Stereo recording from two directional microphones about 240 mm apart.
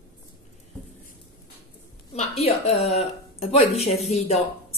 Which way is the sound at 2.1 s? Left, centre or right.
Left.